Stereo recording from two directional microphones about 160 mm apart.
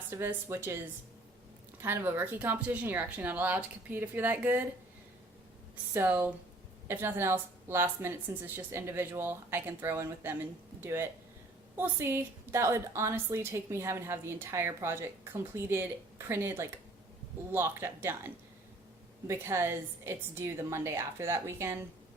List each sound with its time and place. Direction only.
0.1 s a woman's voice: 15° right (ahead or behind)
1.8 s a woman's voice: 15° right (ahead or behind)
5.9 s a woman's voice: 15° right (ahead or behind)
19.3 s a woman's voice: 15° right (ahead or behind)